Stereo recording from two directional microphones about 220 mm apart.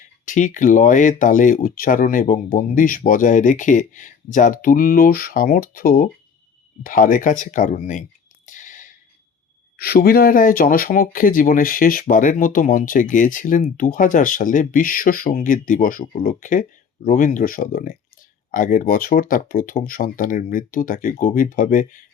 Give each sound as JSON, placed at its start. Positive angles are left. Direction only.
{"t": 0.3, "sound": "speech", "side_deg": 35}
{"t": 8.4, "sound": "whispering", "side_deg": 35}
{"t": 9.7, "sound": "speech", "side_deg": 45}